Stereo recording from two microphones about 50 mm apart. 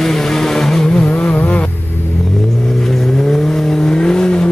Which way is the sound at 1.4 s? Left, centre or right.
Left.